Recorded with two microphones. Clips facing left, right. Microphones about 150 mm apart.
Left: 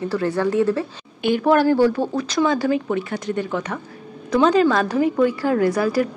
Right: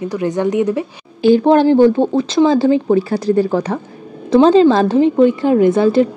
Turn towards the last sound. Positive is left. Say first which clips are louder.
# right 7 dB
turn(degrees=-25)  # may be behind; listen again after turning